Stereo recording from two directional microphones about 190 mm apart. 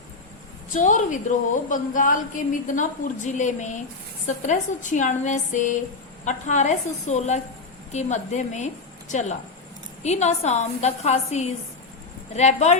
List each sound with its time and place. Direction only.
0.7 s a woman's voice: 40° left (ahead or behind)
10.0 s a woman's voice: 35° left (ahead or behind)